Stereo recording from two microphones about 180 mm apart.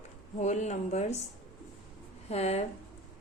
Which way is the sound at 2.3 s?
35° left (ahead or behind).